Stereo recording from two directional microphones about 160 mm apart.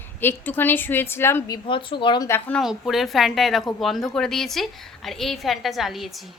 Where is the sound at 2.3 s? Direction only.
10° left (ahead or behind).